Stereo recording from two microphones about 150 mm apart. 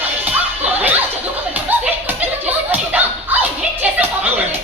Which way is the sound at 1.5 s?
10° right (ahead or behind).